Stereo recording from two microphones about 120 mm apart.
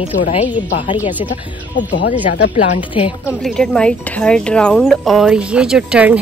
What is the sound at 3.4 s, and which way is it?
Speech, 5° left (ahead or behind).